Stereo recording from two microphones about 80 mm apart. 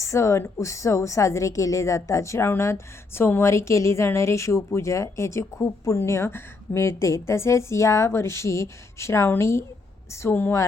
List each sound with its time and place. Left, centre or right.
0.0 s a woman's voice: left
10.2 s a woman's voice: left